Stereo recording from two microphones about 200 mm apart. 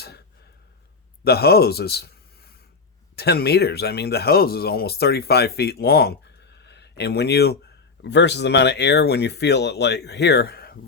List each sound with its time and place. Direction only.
1.2 s a man's voice: 50° left (ahead or behind)
6.6 s a sound: 60° left (ahead or behind)
8.0 s speech: 60° left (ahead or behind)